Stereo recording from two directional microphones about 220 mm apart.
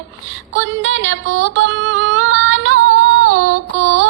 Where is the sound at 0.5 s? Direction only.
60° right (ahead or behind).